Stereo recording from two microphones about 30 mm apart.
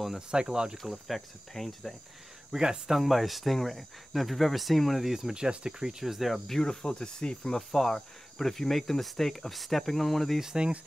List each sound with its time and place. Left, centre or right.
0.3 s speech: right
0.8 s speech: centre
2.5 s speech: right
2.9 s speech: centre
5.0 s speech: centre
5.3 s speech: right
6.4 s speech: centre
7.7 s cricket: centre